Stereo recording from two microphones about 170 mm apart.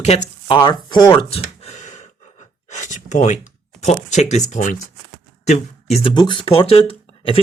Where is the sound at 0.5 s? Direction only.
25° left (ahead or behind).